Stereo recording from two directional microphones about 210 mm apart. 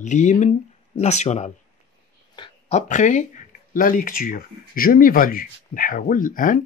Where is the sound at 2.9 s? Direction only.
35° left (ahead or behind).